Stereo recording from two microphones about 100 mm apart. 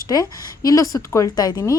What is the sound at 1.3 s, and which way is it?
Speech, 45° left (ahead or behind).